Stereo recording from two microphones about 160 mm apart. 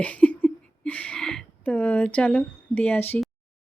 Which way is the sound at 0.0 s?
10° left (ahead or behind).